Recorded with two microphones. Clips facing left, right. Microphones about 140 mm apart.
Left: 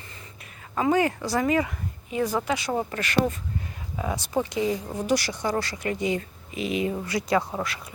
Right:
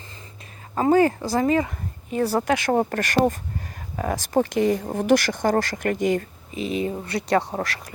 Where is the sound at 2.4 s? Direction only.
50° right (ahead or behind).